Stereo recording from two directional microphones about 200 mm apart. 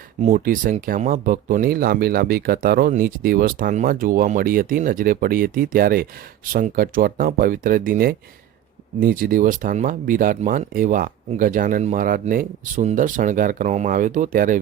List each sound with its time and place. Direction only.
0.2 s speech: 40° right (ahead or behind)